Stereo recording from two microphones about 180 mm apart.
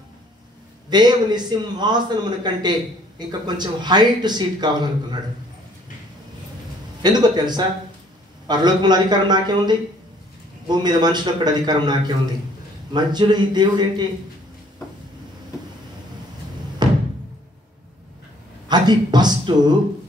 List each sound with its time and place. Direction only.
0.8 s a man's voice: 25° right (ahead or behind)
7.0 s a man's voice: 25° right (ahead or behind)
16.8 s music: 25° right (ahead or behind)
18.7 s a man's voice: 25° right (ahead or behind)